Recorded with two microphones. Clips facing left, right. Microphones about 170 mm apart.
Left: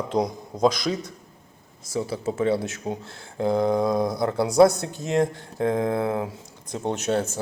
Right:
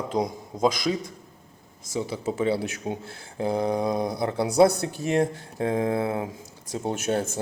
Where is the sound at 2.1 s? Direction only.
30° left (ahead or behind).